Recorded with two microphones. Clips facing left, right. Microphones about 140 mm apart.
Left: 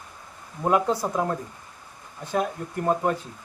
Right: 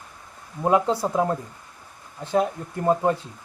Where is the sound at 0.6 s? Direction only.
20° right (ahead or behind).